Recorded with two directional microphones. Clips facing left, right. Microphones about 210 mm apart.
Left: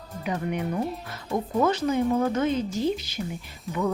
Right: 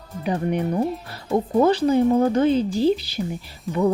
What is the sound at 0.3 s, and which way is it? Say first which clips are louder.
Speech: right 5 dB; 35° right (ahead or behind).